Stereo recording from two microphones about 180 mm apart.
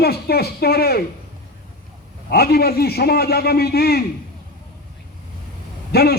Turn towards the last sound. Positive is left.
turn(degrees=60)  # may be behind; listen again after turning